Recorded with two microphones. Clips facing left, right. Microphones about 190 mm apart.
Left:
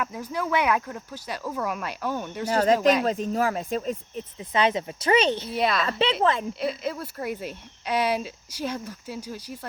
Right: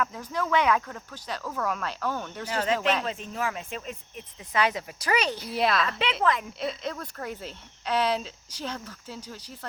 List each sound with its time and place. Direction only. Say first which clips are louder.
0.0 s speech: left 1 dB; 10° left (ahead or behind)
2.5 s speech: left 6 dB; 40° left (ahead or behind)
4.4 s speech: left 3 dB; 25° left (ahead or behind)
5.5 s a woman's voice: right 1 dB; centre (ahead or behind)
6.0 s speech: left 6 dB; 30° left (ahead or behind)
6.6 s speech: left 3 dB; 5° left (ahead or behind)